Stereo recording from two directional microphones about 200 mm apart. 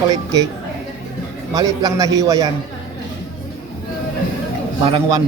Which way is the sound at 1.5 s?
20° right (ahead or behind).